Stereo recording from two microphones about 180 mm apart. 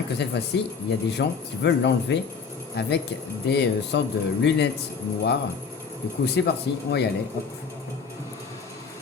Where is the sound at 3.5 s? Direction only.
70° left (ahead or behind).